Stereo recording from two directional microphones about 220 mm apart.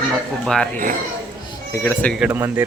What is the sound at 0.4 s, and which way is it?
Speech, 5° left (ahead or behind).